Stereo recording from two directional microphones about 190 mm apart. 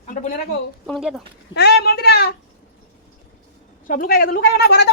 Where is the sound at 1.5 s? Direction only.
60° left (ahead or behind).